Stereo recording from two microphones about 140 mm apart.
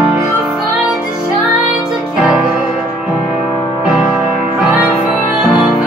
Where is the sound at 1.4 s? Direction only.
5° right (ahead or behind).